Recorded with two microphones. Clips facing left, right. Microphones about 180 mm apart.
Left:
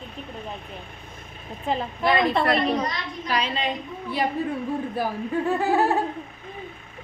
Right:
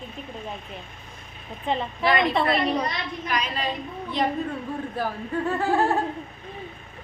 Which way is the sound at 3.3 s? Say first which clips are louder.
Left 3 dB; 25° left (ahead or behind).